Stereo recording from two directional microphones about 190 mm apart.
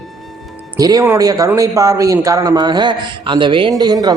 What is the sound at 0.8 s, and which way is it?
A man's voice, 20° right (ahead or behind).